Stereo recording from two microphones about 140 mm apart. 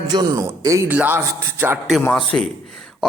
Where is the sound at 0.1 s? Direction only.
30° right (ahead or behind).